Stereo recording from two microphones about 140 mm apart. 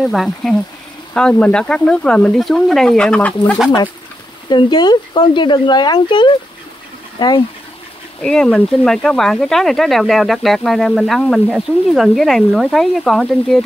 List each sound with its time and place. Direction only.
0.0 s speech: centre (ahead or behind)
4.5 s speech: 30° left (ahead or behind)
8.2 s speech: 5° left (ahead or behind)